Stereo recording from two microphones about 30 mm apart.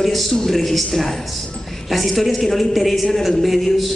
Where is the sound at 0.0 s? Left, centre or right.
Centre.